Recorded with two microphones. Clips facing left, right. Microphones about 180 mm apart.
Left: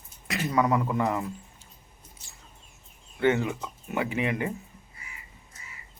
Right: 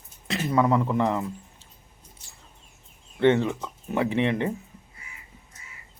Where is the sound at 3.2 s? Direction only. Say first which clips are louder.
Right 4 dB; 30° right (ahead or behind).